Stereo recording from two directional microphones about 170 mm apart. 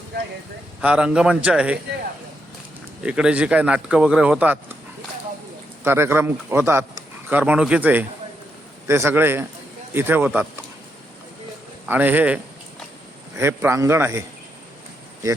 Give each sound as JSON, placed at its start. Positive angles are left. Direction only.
{"t": 0.8, "sound": "a man's voice", "side_deg": -5}
{"t": 3.0, "sound": "a man's voice", "side_deg": -5}
{"t": 5.8, "sound": "a man's voice", "side_deg": -15}
{"t": 11.9, "sound": "a man's voice", "side_deg": -10}